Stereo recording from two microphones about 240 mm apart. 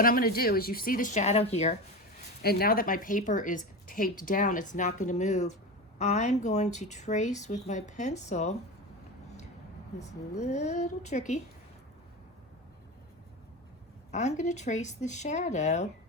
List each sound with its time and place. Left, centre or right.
0.0 s a woman's voice: left
2.4 s a woman's voice: left
10.0 s speech: left
14.1 s speech: left